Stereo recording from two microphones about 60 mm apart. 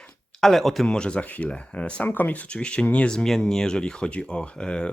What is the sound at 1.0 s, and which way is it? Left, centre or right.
Speech, centre.